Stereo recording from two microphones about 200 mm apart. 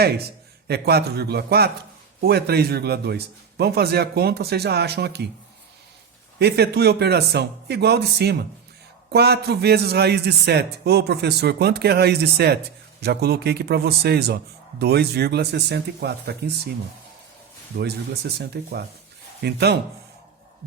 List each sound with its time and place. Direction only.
0.7 s a man's voice: 55° right (ahead or behind)
6.4 s a man's voice: 55° right (ahead or behind)
17.7 s a man's voice: 55° right (ahead or behind)